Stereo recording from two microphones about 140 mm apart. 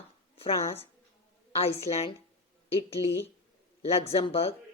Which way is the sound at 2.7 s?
45° left (ahead or behind).